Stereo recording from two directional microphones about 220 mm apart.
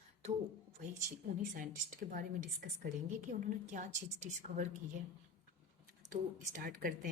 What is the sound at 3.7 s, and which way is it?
Speech, 35° right (ahead or behind).